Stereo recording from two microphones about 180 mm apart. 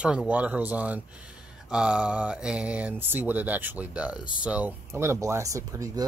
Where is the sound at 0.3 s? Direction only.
10° right (ahead or behind).